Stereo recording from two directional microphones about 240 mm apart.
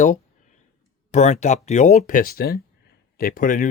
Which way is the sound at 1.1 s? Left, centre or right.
Left.